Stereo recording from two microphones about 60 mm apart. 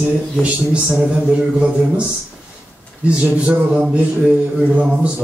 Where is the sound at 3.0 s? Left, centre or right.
Right.